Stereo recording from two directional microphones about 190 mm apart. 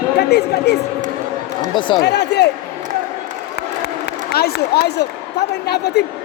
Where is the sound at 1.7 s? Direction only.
25° left (ahead or behind).